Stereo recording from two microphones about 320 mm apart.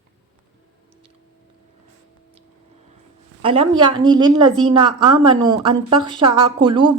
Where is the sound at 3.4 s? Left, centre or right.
Centre.